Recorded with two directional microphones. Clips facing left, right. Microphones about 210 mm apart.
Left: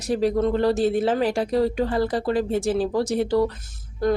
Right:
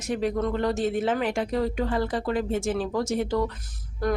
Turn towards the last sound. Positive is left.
turn(degrees=25)  # may be behind; listen again after turning